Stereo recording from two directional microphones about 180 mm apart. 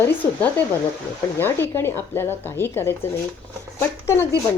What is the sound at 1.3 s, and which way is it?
Speech, 10° left (ahead or behind).